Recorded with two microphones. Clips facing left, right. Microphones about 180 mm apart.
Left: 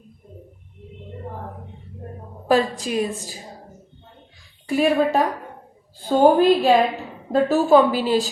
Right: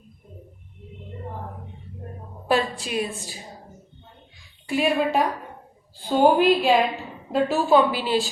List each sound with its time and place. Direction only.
2.5 s a woman's voice: 35° left (ahead or behind)
4.7 s a woman's voice: 40° left (ahead or behind)